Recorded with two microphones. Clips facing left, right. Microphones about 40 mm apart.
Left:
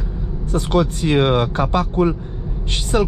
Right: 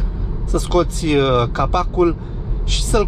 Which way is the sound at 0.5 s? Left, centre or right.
Left.